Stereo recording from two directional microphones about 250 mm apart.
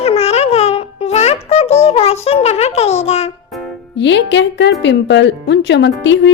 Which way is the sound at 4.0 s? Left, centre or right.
Left.